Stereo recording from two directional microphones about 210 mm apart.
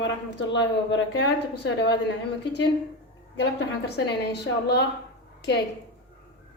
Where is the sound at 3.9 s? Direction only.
55° left (ahead or behind).